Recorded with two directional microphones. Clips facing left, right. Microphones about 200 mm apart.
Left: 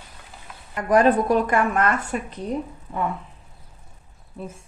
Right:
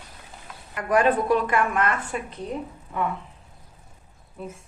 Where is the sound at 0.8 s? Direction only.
35° left (ahead or behind).